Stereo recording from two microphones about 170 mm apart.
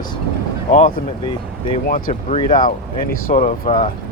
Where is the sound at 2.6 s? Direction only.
55° left (ahead or behind).